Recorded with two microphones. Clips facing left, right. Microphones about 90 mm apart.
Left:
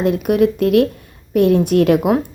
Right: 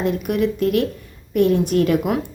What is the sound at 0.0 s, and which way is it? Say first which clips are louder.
A woman's voice: left 5 dB; 55° left (ahead or behind).